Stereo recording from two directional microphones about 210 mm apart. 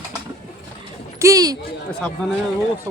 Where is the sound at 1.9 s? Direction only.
5° left (ahead or behind).